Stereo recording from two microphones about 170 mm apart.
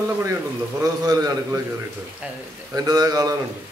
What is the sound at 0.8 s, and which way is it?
Speech, 20° right (ahead or behind).